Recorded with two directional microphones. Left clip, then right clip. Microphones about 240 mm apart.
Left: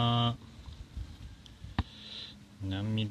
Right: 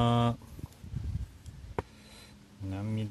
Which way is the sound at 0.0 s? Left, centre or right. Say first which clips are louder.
Right 2 dB; centre.